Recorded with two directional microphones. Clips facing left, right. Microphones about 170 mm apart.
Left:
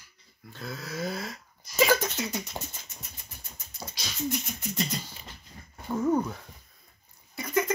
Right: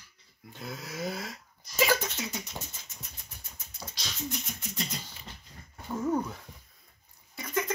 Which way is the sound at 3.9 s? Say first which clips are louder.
Left 6 dB; 10° left (ahead or behind).